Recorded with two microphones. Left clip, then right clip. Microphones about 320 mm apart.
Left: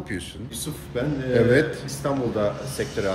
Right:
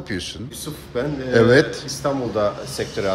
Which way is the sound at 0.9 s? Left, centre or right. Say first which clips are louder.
Right 4 dB; centre.